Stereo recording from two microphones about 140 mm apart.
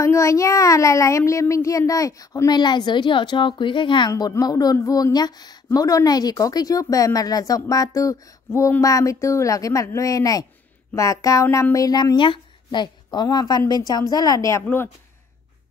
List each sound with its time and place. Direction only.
0.0 s a woman's voice: 20° left (ahead or behind)
4.1 s a woman's voice: 25° left (ahead or behind)
11.4 s child singing: 15° left (ahead or behind)
11.7 s a woman's voice: 25° left (ahead or behind)